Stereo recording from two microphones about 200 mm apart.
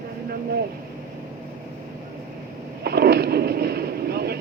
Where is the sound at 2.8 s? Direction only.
50° right (ahead or behind).